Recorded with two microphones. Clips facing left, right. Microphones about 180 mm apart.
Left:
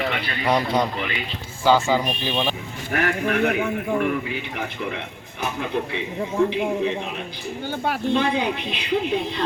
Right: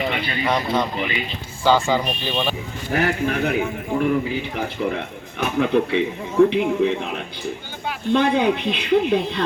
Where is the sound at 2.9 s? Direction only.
35° right (ahead or behind).